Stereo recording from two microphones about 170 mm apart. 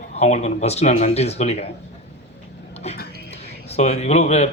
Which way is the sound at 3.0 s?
75° left (ahead or behind).